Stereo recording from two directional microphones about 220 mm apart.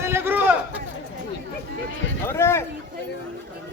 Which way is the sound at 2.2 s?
10° left (ahead or behind).